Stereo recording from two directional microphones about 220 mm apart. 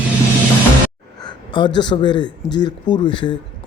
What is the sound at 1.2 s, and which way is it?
Speech, 20° left (ahead or behind).